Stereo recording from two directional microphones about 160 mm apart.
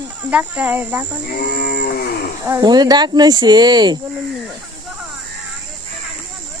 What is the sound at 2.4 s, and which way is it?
A woman's voice, 20° right (ahead or behind).